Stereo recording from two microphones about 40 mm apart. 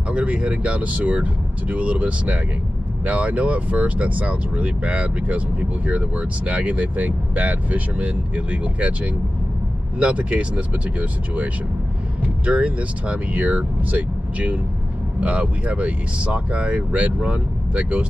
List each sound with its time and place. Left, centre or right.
0.1 s speech: right